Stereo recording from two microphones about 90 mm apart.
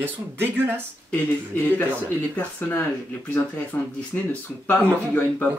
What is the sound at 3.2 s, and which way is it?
Speech, 20° left (ahead or behind).